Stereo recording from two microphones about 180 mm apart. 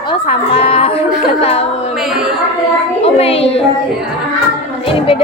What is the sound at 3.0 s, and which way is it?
Speech, 35° left (ahead or behind).